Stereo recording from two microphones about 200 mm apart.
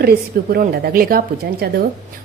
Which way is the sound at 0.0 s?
50° right (ahead or behind).